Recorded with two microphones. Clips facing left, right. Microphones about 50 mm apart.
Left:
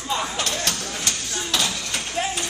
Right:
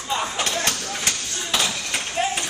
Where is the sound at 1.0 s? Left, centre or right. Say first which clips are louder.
Right 1 dB; right.